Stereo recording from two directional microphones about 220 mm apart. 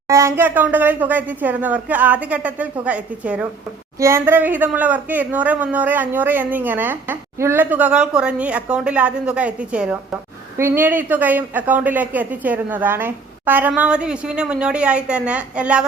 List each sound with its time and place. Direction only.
0.1 s a woman's voice: 15° right (ahead or behind)